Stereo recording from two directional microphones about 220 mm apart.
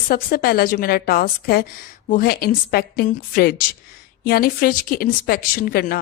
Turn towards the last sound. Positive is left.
turn(degrees=40)  # may be behind; listen again after turning